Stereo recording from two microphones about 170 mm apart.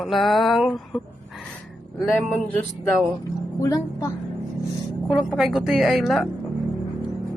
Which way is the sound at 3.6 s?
20° left (ahead or behind).